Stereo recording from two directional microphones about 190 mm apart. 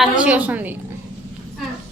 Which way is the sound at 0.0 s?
5° right (ahead or behind).